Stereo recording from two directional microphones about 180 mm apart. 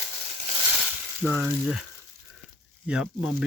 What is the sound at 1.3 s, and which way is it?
Speech, 10° right (ahead or behind).